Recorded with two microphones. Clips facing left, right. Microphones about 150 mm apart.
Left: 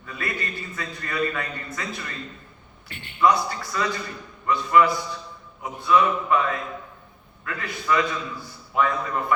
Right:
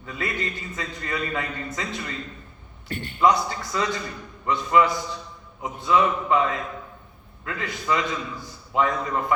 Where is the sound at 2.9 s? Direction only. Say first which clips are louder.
Right 10 dB; 40° right (ahead or behind).